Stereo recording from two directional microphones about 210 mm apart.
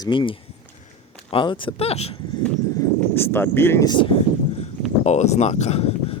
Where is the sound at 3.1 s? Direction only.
10° left (ahead or behind); by 6.1 s 30° left (ahead or behind).